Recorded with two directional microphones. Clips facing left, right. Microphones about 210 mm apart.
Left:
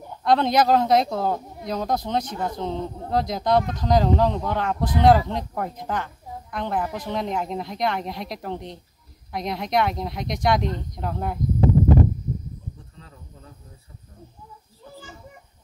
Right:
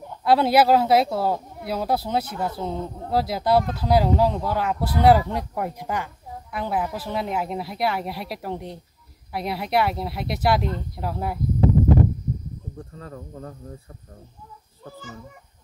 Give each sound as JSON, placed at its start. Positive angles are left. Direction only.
{"t": 0.2, "sound": "speech", "side_deg": -5}
{"t": 12.9, "sound": "speech", "side_deg": -55}